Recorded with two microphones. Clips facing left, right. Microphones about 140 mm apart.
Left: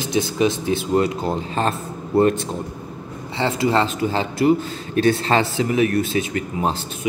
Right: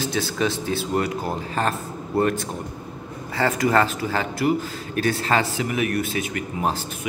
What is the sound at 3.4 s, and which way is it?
Speech, 25° left (ahead or behind).